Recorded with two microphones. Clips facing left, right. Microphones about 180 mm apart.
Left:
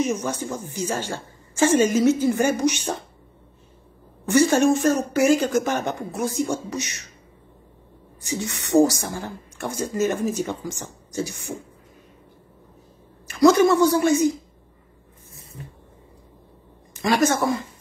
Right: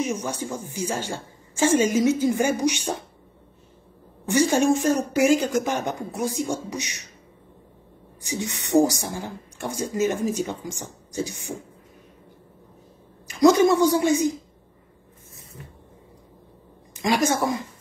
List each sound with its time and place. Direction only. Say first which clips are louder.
0.2 s speech: left 2 dB; 15° right (ahead or behind)
4.3 s speech: left 2 dB; 15° right (ahead or behind)
8.2 s speech: left 1 dB; 15° right (ahead or behind)
13.3 s speech: left 1 dB; 15° right (ahead or behind)
16.9 s a woman's voice: left 2 dB; 15° right (ahead or behind)